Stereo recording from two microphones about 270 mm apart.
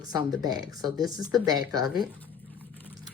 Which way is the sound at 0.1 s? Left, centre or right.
Centre.